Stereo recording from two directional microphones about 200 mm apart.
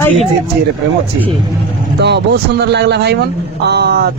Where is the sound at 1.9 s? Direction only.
55° right (ahead or behind).